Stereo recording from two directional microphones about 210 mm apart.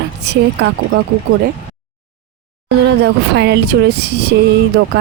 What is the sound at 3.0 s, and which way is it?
Speech, 55° right (ahead or behind).